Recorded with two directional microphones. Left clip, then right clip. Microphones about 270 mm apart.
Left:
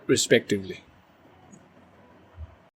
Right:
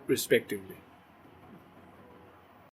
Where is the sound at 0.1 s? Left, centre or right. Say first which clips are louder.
Left 6 dB; centre.